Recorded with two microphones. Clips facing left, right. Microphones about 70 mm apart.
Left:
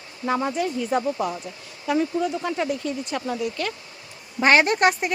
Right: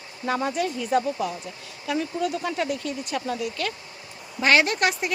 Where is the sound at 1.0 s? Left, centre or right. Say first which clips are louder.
Left 2 dB; left.